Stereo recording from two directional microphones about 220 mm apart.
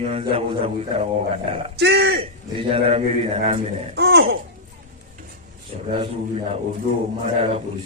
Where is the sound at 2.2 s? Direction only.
25° right (ahead or behind).